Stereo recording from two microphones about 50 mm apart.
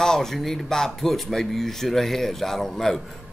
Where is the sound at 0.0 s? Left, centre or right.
Centre.